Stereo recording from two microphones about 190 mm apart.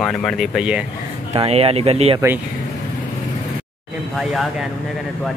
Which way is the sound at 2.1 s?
10° right (ahead or behind).